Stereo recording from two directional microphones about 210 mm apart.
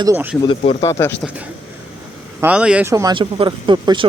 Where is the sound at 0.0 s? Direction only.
10° right (ahead or behind).